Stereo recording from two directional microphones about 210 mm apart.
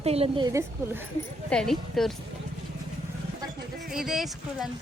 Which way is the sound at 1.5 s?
Centre (ahead or behind).